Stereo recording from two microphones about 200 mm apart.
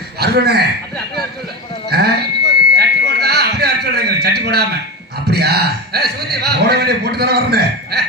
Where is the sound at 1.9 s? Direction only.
55° right (ahead or behind).